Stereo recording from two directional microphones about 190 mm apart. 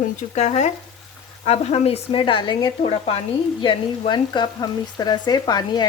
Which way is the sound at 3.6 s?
25° left (ahead or behind).